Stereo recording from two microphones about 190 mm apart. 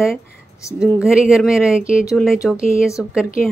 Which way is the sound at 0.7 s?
5° right (ahead or behind).